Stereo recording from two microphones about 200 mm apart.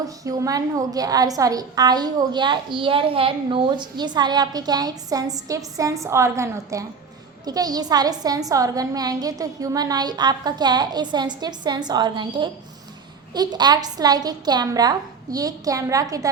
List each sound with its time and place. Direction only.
0.3 s a woman's voice: 15° right (ahead or behind)